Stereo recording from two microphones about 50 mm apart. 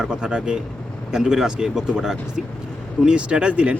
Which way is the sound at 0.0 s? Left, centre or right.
Centre.